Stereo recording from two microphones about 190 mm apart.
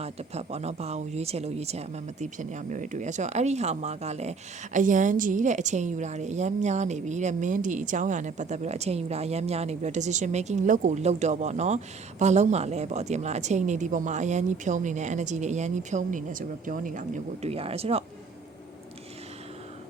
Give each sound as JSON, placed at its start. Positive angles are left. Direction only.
{"t": 0.0, "sound": "speech", "side_deg": -35}